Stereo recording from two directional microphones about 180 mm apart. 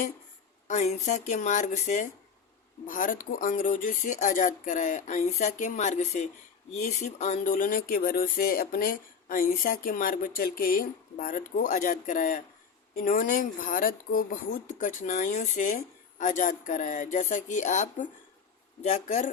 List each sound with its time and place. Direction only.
0.7 s speech: 40° left (ahead or behind)